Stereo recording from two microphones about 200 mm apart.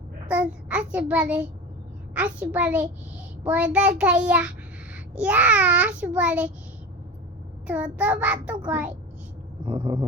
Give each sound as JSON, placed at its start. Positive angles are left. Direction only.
{"t": 0.3, "sound": "a child's voice", "side_deg": -5}
{"t": 2.1, "sound": "child singing", "side_deg": -5}
{"t": 3.4, "sound": "a child's voice", "side_deg": -5}
{"t": 5.2, "sound": "child singing", "side_deg": -5}
{"t": 7.7, "sound": "child singing", "side_deg": -5}
{"t": 9.6, "sound": "a sound", "side_deg": -25}